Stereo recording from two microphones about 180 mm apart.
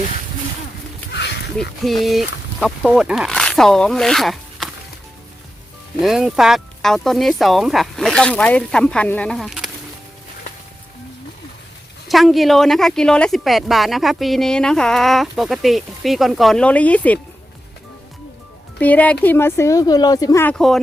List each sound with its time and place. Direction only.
1.1 s a sound: 70° left (ahead or behind)
1.5 s a woman's voice: centre (ahead or behind)
6.0 s a woman's voice: centre (ahead or behind)
12.0 s a woman's voice: centre (ahead or behind)
18.8 s speech: 10° left (ahead or behind)